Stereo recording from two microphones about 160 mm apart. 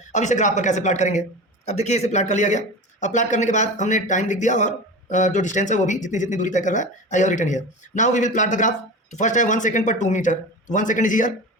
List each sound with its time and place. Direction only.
0.1 s speech: 50° left (ahead or behind)